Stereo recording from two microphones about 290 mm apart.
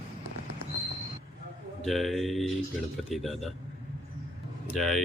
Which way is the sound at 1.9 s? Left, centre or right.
Centre.